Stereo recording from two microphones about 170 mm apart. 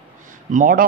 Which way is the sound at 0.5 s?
50° right (ahead or behind).